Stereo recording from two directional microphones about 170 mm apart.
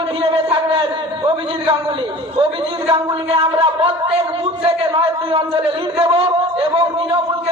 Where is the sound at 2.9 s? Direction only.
35° right (ahead or behind).